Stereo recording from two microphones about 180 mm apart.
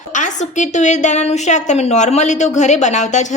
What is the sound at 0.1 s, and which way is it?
A woman's voice, 45° left (ahead or behind).